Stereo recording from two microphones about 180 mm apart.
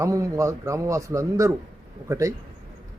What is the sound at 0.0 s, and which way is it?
A man's voice, 15° right (ahead or behind).